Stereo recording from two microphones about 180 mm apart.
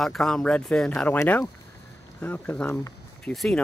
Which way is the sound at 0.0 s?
Centre (ahead or behind).